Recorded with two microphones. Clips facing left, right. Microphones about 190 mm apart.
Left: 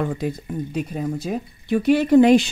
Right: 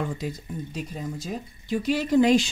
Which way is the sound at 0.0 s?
60° left (ahead or behind).